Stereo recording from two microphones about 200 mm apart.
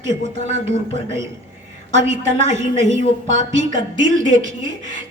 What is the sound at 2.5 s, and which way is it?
A woman's voice, 35° right (ahead or behind).